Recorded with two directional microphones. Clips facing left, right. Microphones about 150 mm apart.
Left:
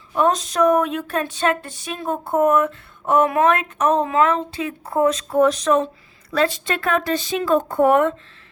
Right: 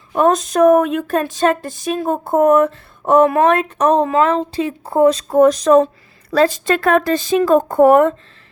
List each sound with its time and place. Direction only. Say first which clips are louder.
0.1 s a woman's voice: right 5 dB; 50° right (ahead or behind)